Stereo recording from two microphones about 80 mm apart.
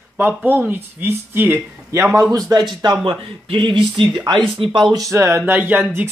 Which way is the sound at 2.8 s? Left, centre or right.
Right.